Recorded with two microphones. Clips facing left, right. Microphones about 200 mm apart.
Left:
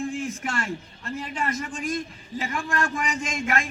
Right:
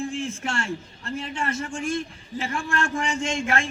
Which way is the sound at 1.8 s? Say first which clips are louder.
Right 2 dB; 30° right (ahead or behind).